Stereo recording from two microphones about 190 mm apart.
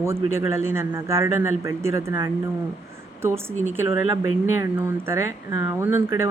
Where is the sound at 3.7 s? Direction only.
10° right (ahead or behind).